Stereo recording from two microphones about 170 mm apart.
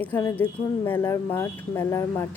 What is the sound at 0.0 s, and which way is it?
Speech, 15° left (ahead or behind).